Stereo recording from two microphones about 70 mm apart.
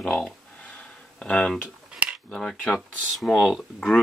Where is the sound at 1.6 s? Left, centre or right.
Centre.